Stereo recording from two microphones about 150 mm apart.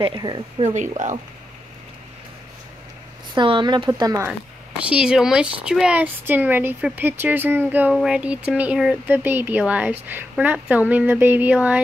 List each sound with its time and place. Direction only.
0.0 s speech: 30° right (ahead or behind)
0.6 s speech: 50° right (ahead or behind)
3.3 s speech: 30° right (ahead or behind)
4.3 s speech: 10° right (ahead or behind)